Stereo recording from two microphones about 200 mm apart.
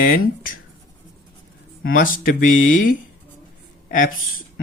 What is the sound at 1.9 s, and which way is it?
Speech, 45° left (ahead or behind).